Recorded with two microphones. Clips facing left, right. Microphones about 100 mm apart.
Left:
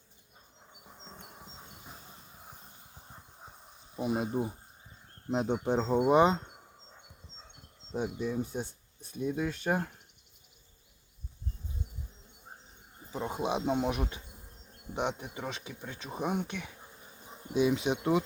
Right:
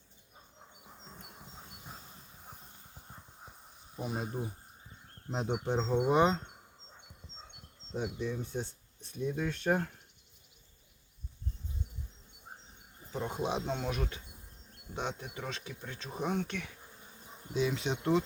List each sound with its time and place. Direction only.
4.0 s speech: 15° left (ahead or behind)
5.8 s speech: 40° left (ahead or behind)
6.1 s speech: 5° left (ahead or behind)
7.9 s speech: 15° left (ahead or behind)
13.1 s a man's voice: 5° left (ahead or behind)
13.7 s speech: 15° left (ahead or behind)